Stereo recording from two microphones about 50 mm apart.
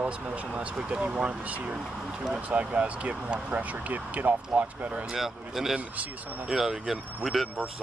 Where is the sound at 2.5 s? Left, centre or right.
Right.